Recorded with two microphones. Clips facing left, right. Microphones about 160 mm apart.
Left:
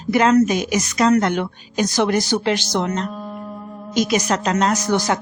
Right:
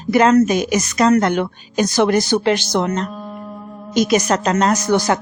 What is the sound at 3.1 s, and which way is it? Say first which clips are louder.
Music: even; centre (ahead or behind).